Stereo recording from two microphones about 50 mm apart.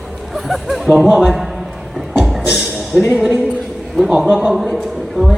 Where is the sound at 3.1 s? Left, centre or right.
Right.